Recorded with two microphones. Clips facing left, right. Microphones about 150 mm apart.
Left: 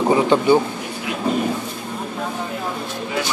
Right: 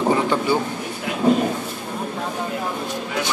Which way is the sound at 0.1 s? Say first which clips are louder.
Left 4 dB; 20° left (ahead or behind).